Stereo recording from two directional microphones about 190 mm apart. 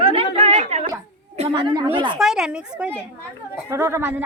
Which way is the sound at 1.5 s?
20° right (ahead or behind).